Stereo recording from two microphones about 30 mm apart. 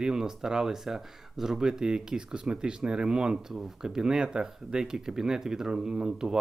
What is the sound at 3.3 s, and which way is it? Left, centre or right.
Speech, centre.